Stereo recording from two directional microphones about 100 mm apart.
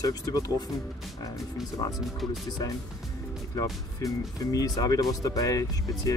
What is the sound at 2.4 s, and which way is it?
Speech, 40° left (ahead or behind).